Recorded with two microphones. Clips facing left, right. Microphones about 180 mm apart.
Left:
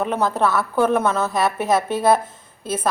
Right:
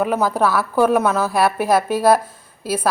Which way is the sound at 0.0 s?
5° right (ahead or behind).